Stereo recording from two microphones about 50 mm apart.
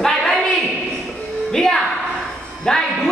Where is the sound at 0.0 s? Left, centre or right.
Centre.